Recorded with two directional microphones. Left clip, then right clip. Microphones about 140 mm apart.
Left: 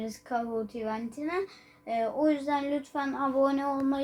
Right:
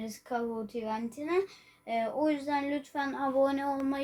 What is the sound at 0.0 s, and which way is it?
Speech, 55° right (ahead or behind).